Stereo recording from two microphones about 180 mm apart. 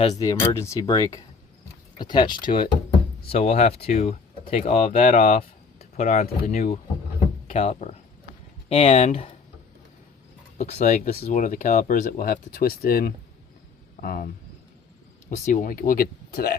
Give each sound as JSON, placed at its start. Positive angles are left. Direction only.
{"t": 0.2, "sound": "speech", "side_deg": 15}
{"t": 10.6, "sound": "speech", "side_deg": 40}
{"t": 15.4, "sound": "speech", "side_deg": 50}